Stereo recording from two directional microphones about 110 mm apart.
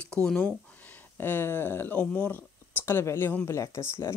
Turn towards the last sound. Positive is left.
turn(degrees=25)  # may be behind; listen again after turning